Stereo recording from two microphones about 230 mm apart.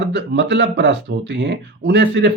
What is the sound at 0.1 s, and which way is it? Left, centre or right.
Speech, right.